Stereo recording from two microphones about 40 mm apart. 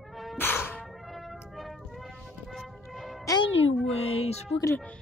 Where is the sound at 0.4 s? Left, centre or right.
Left.